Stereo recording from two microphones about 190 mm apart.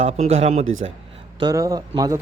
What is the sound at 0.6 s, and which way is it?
Speech, 90° right.